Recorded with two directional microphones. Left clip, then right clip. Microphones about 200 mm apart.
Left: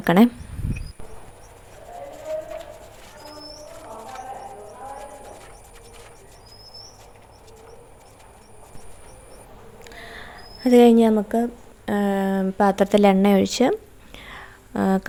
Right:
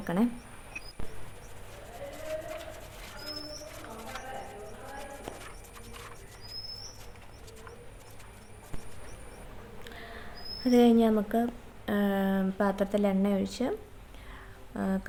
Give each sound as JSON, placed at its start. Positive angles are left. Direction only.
{"t": 0.0, "sound": "speech", "side_deg": 45}
{"t": 9.8, "sound": "a sound", "side_deg": 40}
{"t": 11.9, "sound": "speech", "side_deg": 35}